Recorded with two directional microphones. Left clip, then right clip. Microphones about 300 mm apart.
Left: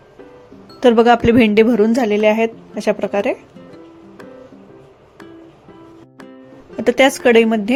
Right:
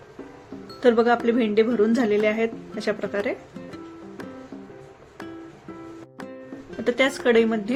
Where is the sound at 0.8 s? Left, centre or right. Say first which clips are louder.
Left 8 dB; left.